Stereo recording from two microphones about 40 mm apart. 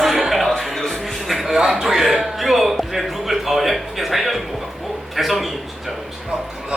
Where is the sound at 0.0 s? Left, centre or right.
Centre.